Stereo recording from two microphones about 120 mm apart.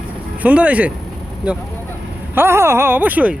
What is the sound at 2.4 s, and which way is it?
Speech, 20° right (ahead or behind).